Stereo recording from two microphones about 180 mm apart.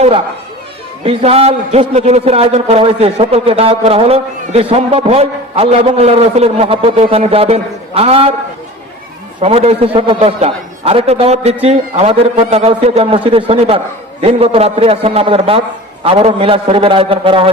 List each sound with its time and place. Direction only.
1.0 s a man's voice: 35° right (ahead or behind)
9.4 s a man's voice: 35° right (ahead or behind)